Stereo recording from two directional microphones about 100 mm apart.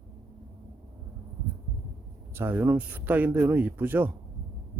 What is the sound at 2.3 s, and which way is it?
Speech, 20° right (ahead or behind).